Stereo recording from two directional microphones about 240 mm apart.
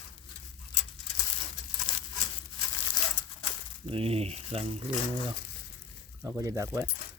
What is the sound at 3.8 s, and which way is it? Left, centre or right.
Speech, right.